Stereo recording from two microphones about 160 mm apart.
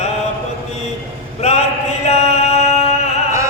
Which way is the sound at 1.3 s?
45° left (ahead or behind).